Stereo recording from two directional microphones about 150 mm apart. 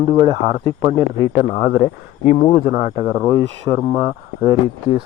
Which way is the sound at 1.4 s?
20° right (ahead or behind).